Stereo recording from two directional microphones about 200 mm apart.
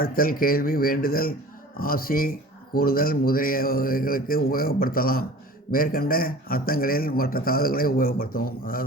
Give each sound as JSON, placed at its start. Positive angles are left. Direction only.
{"t": 0.0, "sound": "a man's voice", "side_deg": 45}